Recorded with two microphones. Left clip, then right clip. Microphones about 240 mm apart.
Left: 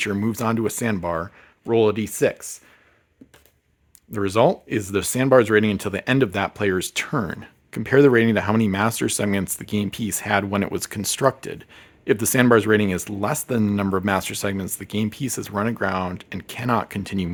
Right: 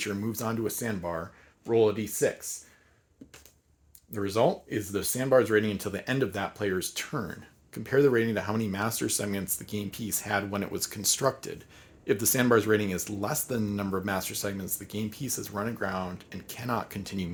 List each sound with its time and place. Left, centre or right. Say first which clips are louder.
0.0 s speech: left 9 dB; left
4.1 s speech: left 8 dB; left